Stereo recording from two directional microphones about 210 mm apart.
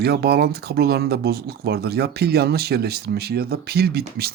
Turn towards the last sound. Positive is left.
turn(degrees=-50)  # may be behind; listen again after turning